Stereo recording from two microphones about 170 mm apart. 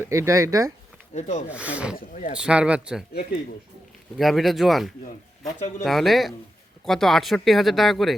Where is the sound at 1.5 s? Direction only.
5° right (ahead or behind).